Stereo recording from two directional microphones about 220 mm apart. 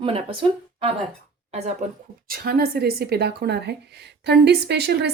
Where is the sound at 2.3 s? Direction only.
45° right (ahead or behind).